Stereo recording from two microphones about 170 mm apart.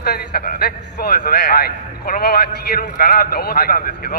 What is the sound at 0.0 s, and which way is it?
A man's voice, 65° left (ahead or behind).